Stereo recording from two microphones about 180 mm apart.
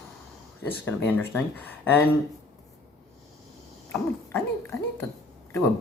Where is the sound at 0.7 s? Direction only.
10° left (ahead or behind).